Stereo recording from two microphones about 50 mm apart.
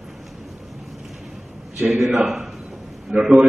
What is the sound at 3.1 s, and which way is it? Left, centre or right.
Speech, right.